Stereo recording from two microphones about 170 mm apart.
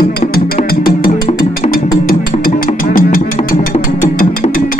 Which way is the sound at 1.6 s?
40° left (ahead or behind).